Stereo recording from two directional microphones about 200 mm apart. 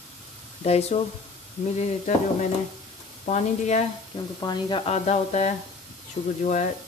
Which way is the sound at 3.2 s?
35° left (ahead or behind).